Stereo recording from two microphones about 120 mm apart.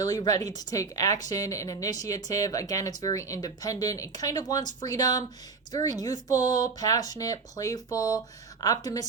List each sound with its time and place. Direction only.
0.0 s a woman's voice: 30° left (ahead or behind)